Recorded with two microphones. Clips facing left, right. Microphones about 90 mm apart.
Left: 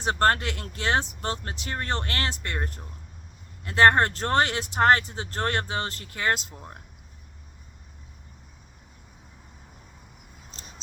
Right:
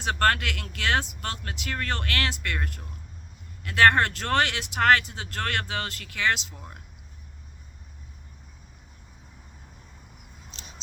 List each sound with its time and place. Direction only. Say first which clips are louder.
0.0 s speech: left 1 dB; 30° left (ahead or behind)